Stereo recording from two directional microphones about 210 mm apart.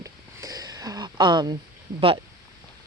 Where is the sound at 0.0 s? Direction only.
15° right (ahead or behind).